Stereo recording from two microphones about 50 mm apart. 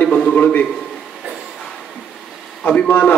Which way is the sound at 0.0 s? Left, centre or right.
Left.